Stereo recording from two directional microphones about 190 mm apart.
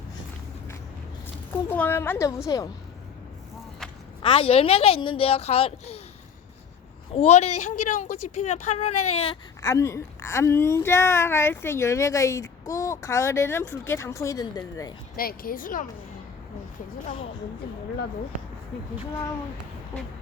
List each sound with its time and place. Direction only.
1.7 s a woman's voice: 10° left (ahead or behind)
4.2 s a woman's voice: 30° left (ahead or behind)
7.1 s a woman's voice: 35° left (ahead or behind)
9.6 s a woman's voice: 15° left (ahead or behind)
15.1 s speech: 50° left (ahead or behind)